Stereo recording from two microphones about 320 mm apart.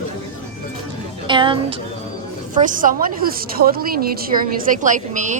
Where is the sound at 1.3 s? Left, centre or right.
Centre.